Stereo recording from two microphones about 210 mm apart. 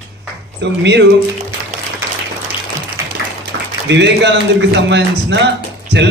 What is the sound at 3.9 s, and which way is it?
A man's voice, 55° right (ahead or behind).